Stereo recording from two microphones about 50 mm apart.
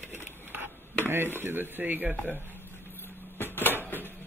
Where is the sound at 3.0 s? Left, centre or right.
Left.